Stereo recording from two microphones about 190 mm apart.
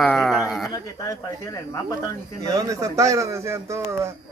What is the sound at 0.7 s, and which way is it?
Speech, 20° left (ahead or behind).